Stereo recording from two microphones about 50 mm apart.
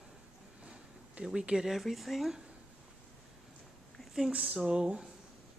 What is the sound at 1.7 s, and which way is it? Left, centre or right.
Speech, centre.